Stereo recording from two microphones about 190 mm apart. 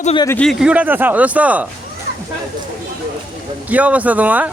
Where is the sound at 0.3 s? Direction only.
5° left (ahead or behind).